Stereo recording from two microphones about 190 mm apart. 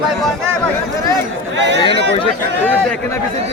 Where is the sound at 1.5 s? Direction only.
65° right (ahead or behind).